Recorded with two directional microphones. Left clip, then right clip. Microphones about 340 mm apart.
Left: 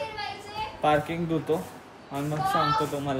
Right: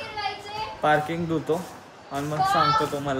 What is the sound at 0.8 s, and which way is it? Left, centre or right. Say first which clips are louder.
Speech: right 2 dB; centre.